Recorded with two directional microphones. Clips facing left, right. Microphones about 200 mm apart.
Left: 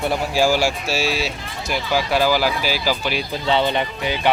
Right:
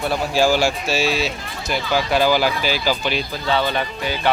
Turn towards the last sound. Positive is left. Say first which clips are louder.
# left 1 dB
turn(degrees=20)  # may be behind; listen again after turning